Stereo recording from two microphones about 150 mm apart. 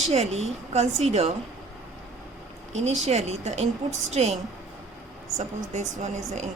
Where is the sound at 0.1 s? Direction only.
45° right (ahead or behind).